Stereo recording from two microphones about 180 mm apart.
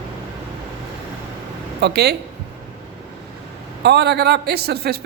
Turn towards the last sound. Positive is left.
turn(degrees=-60)  # may be behind; listen again after turning